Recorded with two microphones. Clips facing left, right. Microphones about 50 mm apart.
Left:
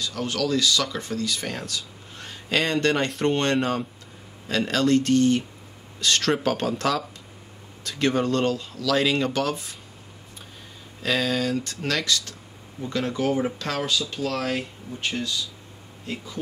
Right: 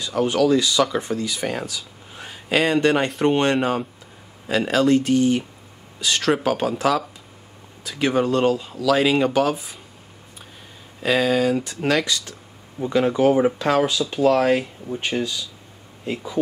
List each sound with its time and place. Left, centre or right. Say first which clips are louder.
0.0 s speech: right 8 dB; centre
11.0 s speech: right 5 dB; centre